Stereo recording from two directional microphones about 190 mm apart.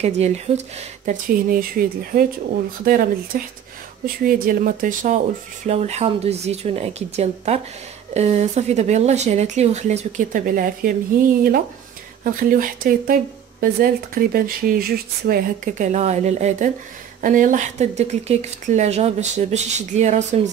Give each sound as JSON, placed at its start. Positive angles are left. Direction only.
{"t": 0.0, "sound": "speech", "side_deg": -35}
{"t": 1.0, "sound": "a woman's voice", "side_deg": -50}
{"t": 12.2, "sound": "a woman's voice", "side_deg": -45}